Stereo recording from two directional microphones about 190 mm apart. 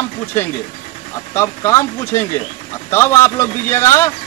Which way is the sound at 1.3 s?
15° left (ahead or behind).